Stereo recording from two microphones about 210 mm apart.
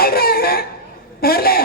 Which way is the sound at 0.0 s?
45° left (ahead or behind).